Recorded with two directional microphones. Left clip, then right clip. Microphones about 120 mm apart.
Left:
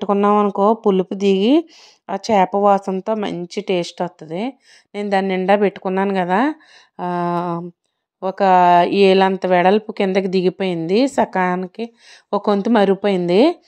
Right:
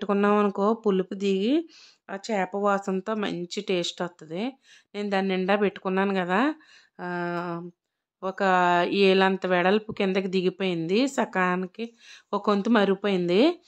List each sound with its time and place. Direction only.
0.0 s speech: 25° left (ahead or behind); by 2.6 s 55° left (ahead or behind)
2.6 s speech: 35° left (ahead or behind)
7.0 s a sound: 65° left (ahead or behind)
8.2 s speech: 40° left (ahead or behind)